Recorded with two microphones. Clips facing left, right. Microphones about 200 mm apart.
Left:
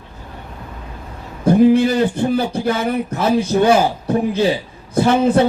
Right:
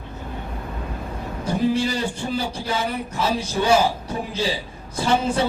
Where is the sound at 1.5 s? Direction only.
55° left (ahead or behind).